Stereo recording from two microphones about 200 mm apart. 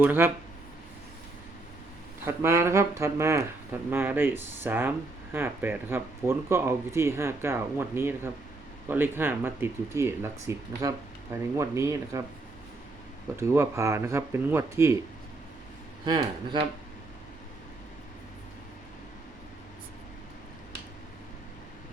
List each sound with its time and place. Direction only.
0.0 s speech: 10° right (ahead or behind)
2.2 s speech: 15° right (ahead or behind)
13.3 s speech: 15° right (ahead or behind)
16.0 s speech: 20° right (ahead or behind)